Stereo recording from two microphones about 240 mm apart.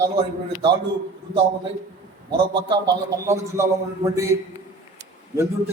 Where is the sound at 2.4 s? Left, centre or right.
Right.